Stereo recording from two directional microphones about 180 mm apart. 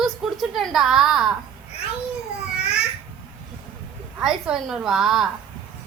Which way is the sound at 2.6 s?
5° right (ahead or behind).